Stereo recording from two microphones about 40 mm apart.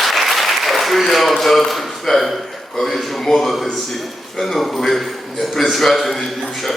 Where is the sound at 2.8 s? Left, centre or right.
Centre.